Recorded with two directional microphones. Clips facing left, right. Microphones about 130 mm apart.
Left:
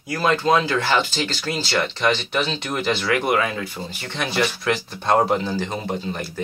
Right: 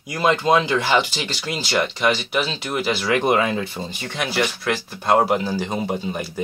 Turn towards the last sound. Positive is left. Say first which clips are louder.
# right 1 dB
turn(degrees=-10)  # may be behind; listen again after turning